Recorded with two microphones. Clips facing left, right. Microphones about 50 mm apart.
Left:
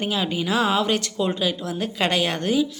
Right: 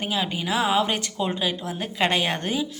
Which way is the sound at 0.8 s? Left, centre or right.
Centre.